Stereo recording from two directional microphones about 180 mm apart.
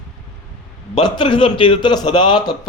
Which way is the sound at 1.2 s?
25° left (ahead or behind).